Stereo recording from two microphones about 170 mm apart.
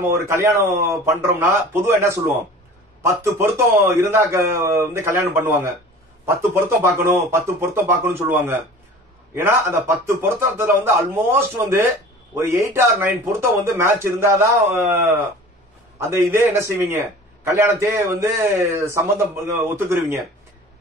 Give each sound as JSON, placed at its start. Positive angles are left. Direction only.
{"t": 0.0, "sound": "a man's voice", "side_deg": -15}